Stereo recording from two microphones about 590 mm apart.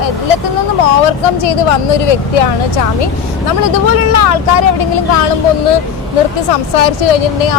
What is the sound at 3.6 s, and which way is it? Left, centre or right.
Speech, left.